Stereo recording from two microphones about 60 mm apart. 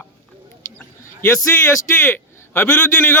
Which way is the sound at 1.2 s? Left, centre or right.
Left.